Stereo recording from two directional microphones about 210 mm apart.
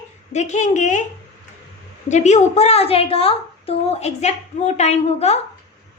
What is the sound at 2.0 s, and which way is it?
A woman's voice, 35° left (ahead or behind).